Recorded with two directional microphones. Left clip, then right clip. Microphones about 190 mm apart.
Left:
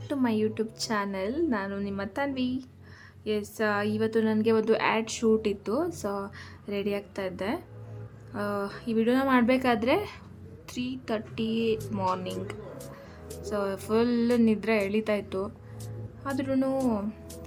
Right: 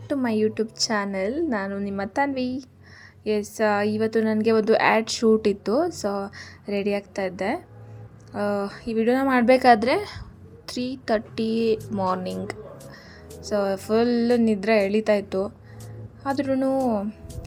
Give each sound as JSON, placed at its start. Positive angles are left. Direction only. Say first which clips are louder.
{"t": 0.1, "sound": "a woman's voice", "louder": "right 5 dB", "side_deg": -20}